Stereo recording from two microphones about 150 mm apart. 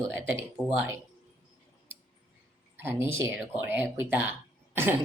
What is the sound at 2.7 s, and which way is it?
Speech, 15° right (ahead or behind).